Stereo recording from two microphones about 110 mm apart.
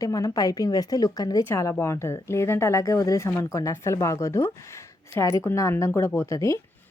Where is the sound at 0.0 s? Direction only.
30° left (ahead or behind).